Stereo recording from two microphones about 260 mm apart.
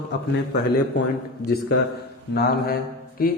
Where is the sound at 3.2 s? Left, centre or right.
Left.